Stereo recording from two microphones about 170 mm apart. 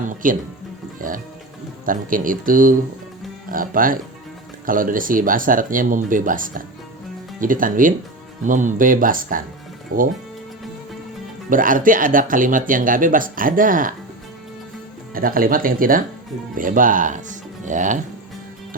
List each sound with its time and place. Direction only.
0.0 s music: 50° right (ahead or behind)
0.9 s speech: 55° right (ahead or behind)
11.4 s speech: 55° right (ahead or behind)
15.1 s speech: 55° right (ahead or behind)